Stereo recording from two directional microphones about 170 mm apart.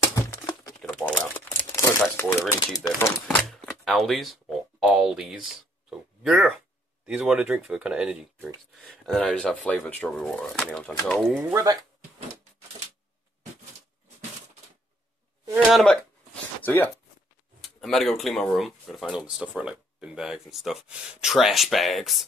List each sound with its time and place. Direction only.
0.2 s a sound: 20° left (ahead or behind)
0.8 s a sound: 5° left (ahead or behind)
1.7 s crumpling: 15° left (ahead or behind)
2.7 s speech: 20° left (ahead or behind)
3.3 s speech: 5° left (ahead or behind)
5.9 s oink: 5° right (ahead or behind)
7.1 s speech: 5° right (ahead or behind)
11.5 s speech: 20° right (ahead or behind)
15.7 s speech: 5° left (ahead or behind)